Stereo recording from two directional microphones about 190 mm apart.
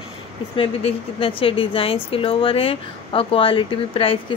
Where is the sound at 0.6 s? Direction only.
30° left (ahead or behind).